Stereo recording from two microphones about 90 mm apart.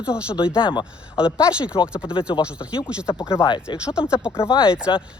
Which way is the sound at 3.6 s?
10° right (ahead or behind).